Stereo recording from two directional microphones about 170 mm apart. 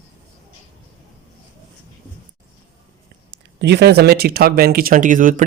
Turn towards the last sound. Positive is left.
turn(degrees=-50)  # may be behind; listen again after turning